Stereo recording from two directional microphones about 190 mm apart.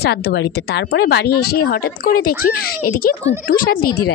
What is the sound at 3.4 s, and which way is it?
Speech, 50° left (ahead or behind).